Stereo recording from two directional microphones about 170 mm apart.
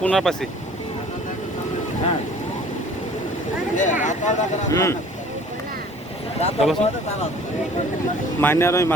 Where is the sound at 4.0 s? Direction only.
45° left (ahead or behind).